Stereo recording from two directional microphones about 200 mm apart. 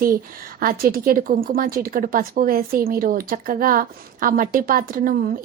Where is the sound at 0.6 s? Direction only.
45° right (ahead or behind).